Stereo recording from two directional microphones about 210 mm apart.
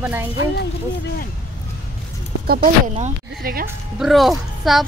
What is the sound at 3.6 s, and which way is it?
A woman's voice, centre (ahead or behind).